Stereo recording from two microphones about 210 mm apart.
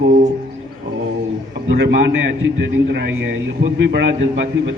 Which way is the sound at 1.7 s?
50° right (ahead or behind).